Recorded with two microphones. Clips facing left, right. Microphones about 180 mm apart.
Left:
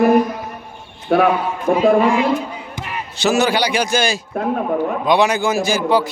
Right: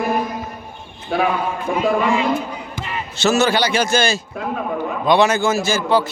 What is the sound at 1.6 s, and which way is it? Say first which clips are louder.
Speech: left 6 dB; 35° left (ahead or behind).